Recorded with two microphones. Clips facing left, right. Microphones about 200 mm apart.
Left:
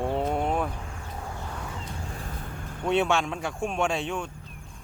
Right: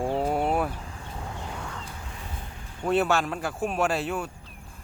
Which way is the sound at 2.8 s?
5° right (ahead or behind).